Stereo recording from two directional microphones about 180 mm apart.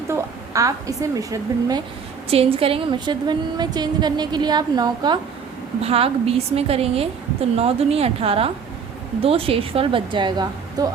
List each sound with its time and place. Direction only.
0.1 s a woman's voice: 20° right (ahead or behind)
2.3 s a woman's voice: 30° right (ahead or behind)
5.8 s a woman's voice: 35° right (ahead or behind)